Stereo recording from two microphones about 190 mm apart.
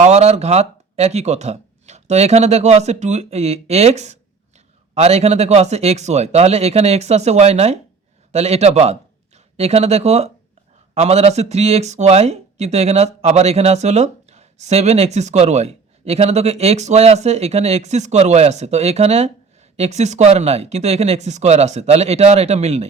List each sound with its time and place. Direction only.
0.0 s speech: 35° right (ahead or behind)